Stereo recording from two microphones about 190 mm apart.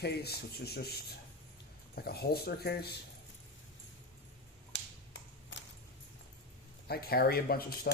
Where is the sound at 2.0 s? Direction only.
55° left (ahead or behind).